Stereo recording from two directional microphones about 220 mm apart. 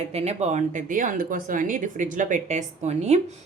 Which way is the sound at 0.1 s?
30° right (ahead or behind).